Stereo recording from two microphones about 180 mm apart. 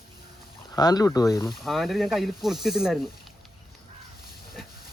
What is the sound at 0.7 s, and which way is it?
Speech, 20° left (ahead or behind).